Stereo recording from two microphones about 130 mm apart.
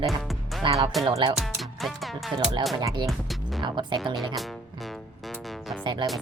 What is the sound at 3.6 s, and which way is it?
Speech, 35° right (ahead or behind).